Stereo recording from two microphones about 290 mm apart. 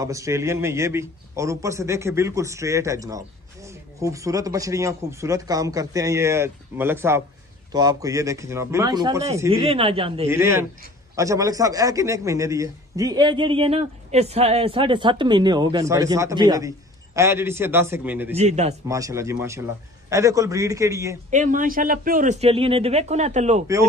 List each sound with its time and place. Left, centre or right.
0.0 s a man's voice: centre
18.3 s speech: right
18.9 s a man's voice: centre
21.3 s speech: right